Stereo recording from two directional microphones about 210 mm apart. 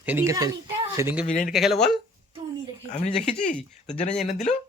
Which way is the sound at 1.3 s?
40° left (ahead or behind).